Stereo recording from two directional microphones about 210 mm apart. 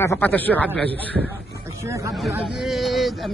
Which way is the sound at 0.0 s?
10° left (ahead or behind).